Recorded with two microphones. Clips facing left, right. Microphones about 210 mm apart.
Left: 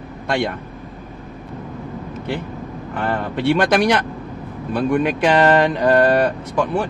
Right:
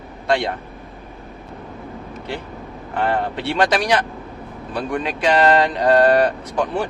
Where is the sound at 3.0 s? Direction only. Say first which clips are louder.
Right 1 dB; 55° left (ahead or behind).